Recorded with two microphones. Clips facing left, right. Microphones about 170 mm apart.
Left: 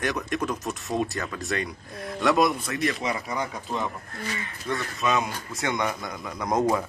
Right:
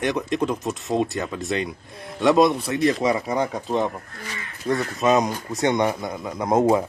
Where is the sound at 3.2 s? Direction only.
25° right (ahead or behind).